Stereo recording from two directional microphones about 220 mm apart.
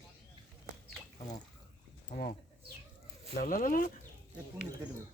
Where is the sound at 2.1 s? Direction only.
35° left (ahead or behind).